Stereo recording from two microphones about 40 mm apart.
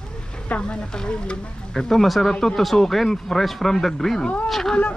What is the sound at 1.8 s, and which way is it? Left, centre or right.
Speech, centre.